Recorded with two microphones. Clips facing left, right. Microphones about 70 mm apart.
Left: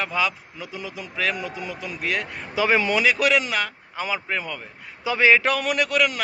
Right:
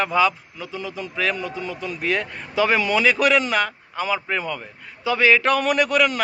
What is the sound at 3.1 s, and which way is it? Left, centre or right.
A man's voice, centre.